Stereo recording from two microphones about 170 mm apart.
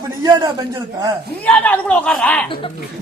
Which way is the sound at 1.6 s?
10° left (ahead or behind).